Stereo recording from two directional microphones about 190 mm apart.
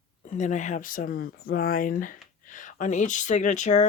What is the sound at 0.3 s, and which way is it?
Speech, 40° left (ahead or behind).